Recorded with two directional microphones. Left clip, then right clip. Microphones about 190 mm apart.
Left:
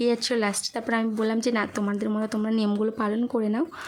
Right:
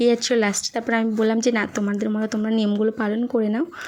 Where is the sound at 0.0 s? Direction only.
15° right (ahead or behind).